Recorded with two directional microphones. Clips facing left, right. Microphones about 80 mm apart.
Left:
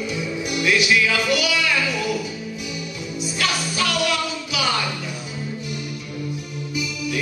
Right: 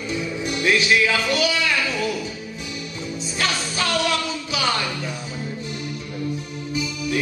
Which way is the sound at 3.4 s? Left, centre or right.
Right.